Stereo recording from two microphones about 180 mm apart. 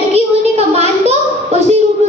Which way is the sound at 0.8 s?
40° right (ahead or behind).